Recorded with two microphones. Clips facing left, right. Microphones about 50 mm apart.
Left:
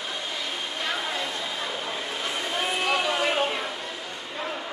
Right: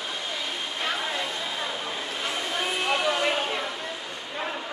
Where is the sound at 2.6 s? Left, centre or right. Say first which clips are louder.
Even; centre.